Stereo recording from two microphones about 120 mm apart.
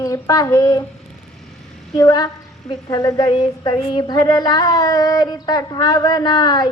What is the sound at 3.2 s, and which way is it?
Female singing, 40° left (ahead or behind).